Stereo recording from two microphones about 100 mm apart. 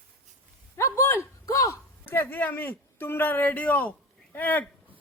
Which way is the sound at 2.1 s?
20° left (ahead or behind).